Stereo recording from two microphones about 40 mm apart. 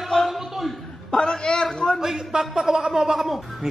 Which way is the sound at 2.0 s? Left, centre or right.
Centre.